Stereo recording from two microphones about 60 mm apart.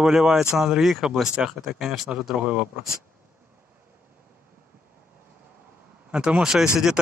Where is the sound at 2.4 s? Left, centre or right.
Centre.